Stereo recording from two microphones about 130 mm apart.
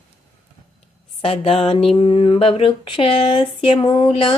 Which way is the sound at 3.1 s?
45° left (ahead or behind).